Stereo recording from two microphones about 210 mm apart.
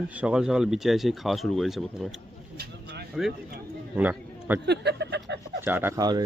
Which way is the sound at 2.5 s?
50° right (ahead or behind).